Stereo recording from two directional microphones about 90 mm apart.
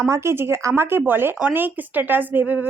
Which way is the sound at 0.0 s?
35° right (ahead or behind).